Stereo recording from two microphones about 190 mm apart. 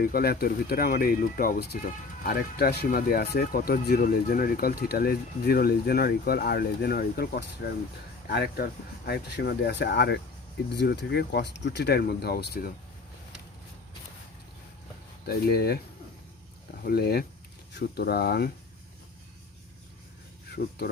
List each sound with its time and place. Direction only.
0.0 s speech: 50° left (ahead or behind)
15.3 s speech: 55° left (ahead or behind)
16.8 s speech: 55° left (ahead or behind)
20.6 s speech: 50° left (ahead or behind)